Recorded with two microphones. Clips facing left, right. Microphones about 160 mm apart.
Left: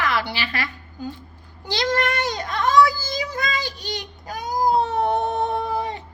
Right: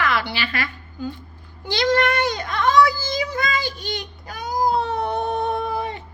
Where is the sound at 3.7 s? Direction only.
40° left (ahead or behind).